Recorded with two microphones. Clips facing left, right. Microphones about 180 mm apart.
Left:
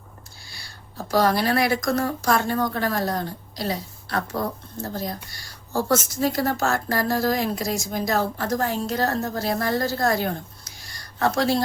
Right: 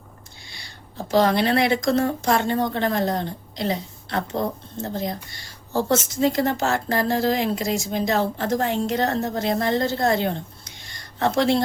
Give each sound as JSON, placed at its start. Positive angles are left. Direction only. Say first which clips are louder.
{"t": 0.5, "sound": "speech", "louder": "right 2 dB", "side_deg": -20}